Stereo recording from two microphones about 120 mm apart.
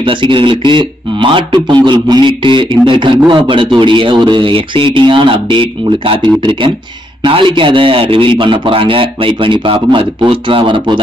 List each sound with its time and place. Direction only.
0.0 s a man's voice: 45° right (ahead or behind)